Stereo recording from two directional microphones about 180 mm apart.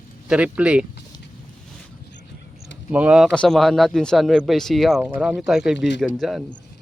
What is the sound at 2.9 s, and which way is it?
A man's voice, 5° right (ahead or behind).